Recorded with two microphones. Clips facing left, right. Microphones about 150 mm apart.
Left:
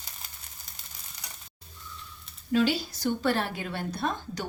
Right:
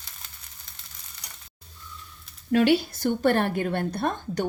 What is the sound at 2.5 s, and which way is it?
A woman's voice, 60° right (ahead or behind).